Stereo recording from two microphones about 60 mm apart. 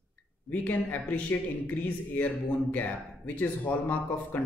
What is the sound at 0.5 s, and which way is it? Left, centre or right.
Speech, left.